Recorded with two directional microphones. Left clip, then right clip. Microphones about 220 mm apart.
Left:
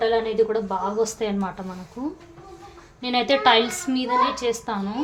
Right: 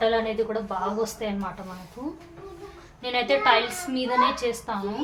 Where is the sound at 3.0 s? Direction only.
45° left (ahead or behind).